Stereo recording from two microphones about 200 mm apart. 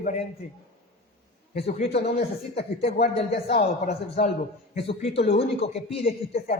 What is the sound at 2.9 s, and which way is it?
A woman's voice, 30° left (ahead or behind).